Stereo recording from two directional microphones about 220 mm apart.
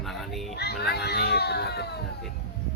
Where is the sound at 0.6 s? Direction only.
45° left (ahead or behind).